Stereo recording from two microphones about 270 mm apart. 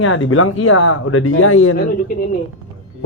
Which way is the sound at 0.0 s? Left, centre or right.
Left.